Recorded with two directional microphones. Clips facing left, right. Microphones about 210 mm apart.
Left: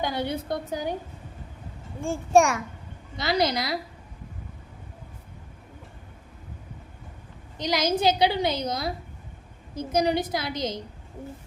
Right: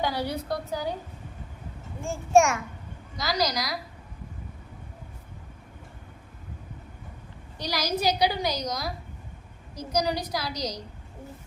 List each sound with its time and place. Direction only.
0.0 s a woman's voice: 20° left (ahead or behind)
2.0 s a child's voice: 35° left (ahead or behind)
7.6 s a woman's voice: 20° left (ahead or behind)